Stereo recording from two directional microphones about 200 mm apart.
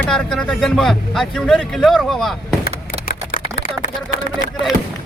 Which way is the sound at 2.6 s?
50° left (ahead or behind).